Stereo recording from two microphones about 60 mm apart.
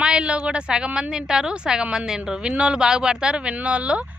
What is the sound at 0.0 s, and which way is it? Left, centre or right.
A woman's voice, centre.